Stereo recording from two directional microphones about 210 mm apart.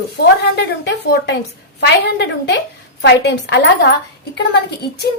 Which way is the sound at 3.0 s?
55° left (ahead or behind).